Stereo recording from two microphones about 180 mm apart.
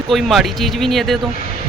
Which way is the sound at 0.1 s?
Centre (ahead or behind).